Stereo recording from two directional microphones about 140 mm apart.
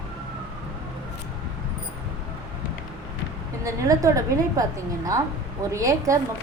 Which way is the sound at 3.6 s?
25° right (ahead or behind).